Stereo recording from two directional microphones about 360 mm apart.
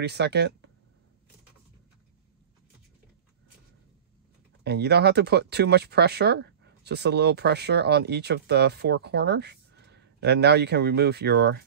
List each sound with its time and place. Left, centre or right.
0.0 s speech: right
4.6 s speech: right